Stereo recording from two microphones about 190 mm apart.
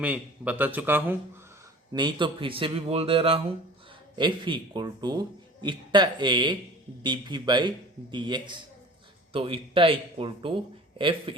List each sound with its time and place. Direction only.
0.0 s a man's voice: 10° right (ahead or behind)
1.9 s a man's voice: 25° right (ahead or behind)